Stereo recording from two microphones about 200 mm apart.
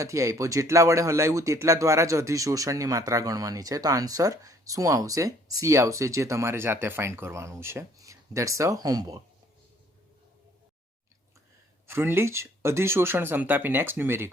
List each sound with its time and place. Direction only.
0.0 s speech: 15° right (ahead or behind)
11.9 s speech: 10° right (ahead or behind)